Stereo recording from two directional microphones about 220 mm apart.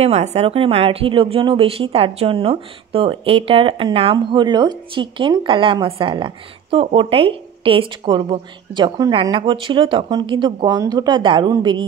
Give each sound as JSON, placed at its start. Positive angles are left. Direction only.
{"t": 0.0, "sound": "speech", "side_deg": -30}